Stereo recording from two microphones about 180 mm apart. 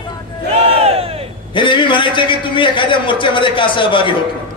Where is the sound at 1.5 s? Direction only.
25° left (ahead or behind).